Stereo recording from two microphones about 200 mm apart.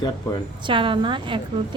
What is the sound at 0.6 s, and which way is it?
Speech, 25° right (ahead or behind).